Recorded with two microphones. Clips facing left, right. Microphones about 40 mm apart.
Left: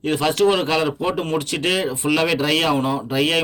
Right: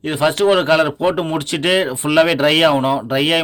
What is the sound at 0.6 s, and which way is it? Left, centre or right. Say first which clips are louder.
A man's voice: right 6 dB; right.